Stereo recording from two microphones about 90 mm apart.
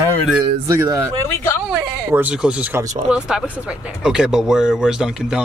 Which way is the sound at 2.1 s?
20° right (ahead or behind).